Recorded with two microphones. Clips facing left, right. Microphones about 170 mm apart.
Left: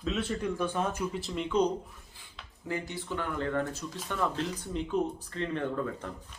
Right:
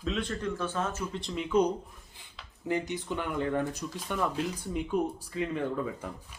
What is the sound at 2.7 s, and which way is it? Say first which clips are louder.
A man's voice: right 4 dB; 20° right (ahead or behind).